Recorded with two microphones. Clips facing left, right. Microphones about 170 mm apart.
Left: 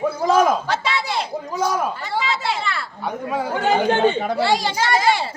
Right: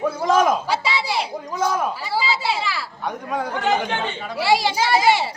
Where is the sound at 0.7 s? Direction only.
10° right (ahead or behind).